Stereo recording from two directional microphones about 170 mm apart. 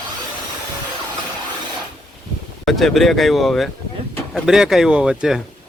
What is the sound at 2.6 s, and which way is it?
A man's voice, centre (ahead or behind).